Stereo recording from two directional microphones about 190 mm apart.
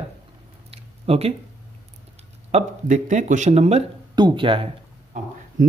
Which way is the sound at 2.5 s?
35° right (ahead or behind).